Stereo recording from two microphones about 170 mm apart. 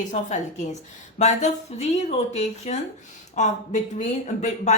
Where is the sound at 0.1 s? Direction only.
45° left (ahead or behind).